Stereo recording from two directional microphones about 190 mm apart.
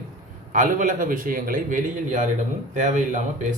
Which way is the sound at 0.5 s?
45° right (ahead or behind).